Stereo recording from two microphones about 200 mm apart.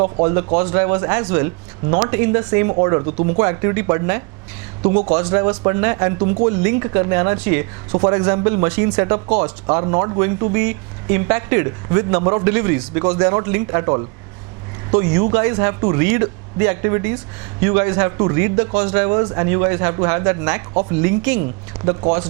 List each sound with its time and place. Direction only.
0.0 s speech: 25° right (ahead or behind)
4.8 s speech: 35° right (ahead or behind)
7.3 s speech: 10° right (ahead or behind)
7.9 s speech: 25° right (ahead or behind)
21.8 s speech: 25° right (ahead or behind)